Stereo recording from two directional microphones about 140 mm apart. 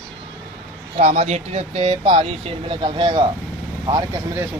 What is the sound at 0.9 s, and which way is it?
Speech, 50° right (ahead or behind).